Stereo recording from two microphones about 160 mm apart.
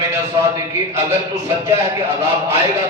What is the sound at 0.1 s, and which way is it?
A man's voice, 20° right (ahead or behind).